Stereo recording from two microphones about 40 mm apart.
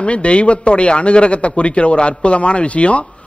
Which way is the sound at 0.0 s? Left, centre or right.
Left.